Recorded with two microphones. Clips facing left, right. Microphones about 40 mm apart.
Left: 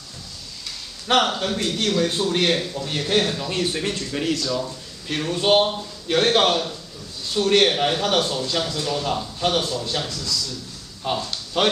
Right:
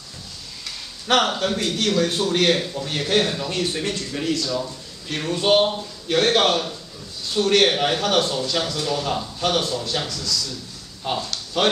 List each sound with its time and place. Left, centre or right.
1.0 s a man's voice: centre
3.4 s a man's voice: centre
11.1 s a man's voice: centre
11.6 s speech: centre